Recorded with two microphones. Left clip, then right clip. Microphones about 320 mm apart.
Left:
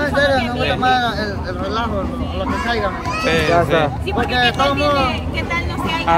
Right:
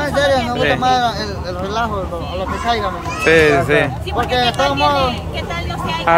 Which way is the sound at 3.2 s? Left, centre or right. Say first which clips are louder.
Right 4 dB; centre.